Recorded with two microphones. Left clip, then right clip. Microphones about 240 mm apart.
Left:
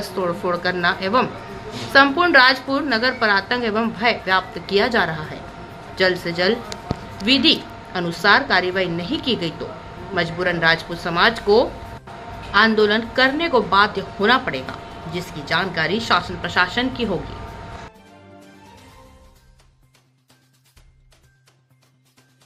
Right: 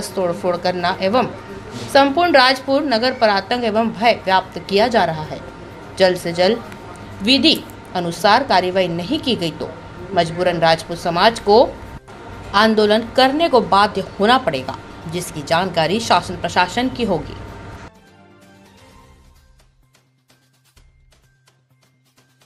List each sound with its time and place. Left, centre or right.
0.0 s a woman's voice: centre